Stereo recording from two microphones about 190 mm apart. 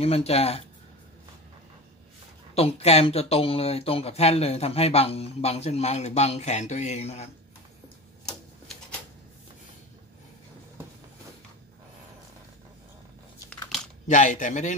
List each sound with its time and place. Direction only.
0.0 s speech: 30° left (ahead or behind)
2.5 s speech: 30° left (ahead or behind)
14.0 s speech: 40° left (ahead or behind)